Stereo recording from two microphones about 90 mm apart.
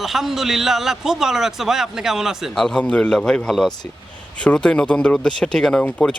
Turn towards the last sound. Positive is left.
turn(degrees=10)  # may be behind; listen again after turning